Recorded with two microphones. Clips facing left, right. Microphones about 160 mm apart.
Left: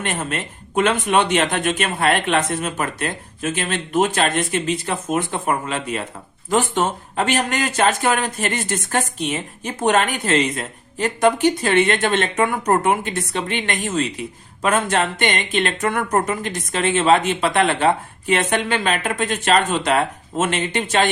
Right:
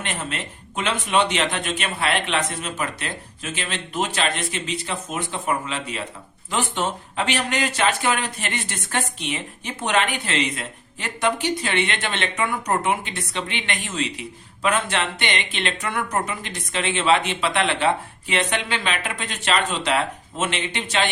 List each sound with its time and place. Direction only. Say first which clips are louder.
0.0 s a man's voice: left 5 dB; 50° left (ahead or behind)